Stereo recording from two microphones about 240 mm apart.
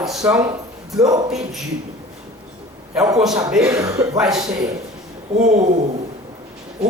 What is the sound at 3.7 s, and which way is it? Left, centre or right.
Speech, centre.